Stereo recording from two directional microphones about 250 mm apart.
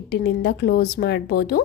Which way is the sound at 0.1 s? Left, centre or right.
Left.